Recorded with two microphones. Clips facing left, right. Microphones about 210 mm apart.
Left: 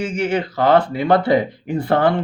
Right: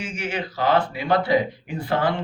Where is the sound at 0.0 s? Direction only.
55° left (ahead or behind).